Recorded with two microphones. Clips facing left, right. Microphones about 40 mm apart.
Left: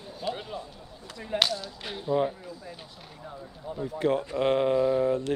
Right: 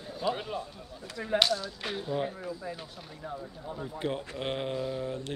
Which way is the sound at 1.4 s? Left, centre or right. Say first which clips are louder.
Left 3 dB; centre.